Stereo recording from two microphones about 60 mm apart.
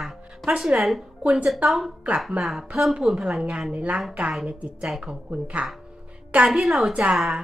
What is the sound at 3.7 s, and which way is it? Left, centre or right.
Speech, right.